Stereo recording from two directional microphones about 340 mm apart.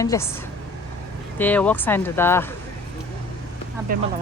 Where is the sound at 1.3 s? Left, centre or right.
Centre.